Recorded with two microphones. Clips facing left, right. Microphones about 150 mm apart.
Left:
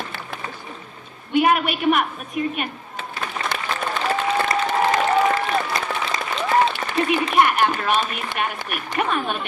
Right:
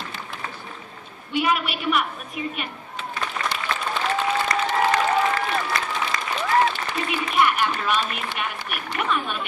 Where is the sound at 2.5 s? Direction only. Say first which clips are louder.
Left 4 dB; 50° left (ahead or behind).